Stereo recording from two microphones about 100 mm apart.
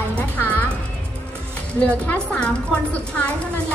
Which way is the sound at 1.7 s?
15° left (ahead or behind).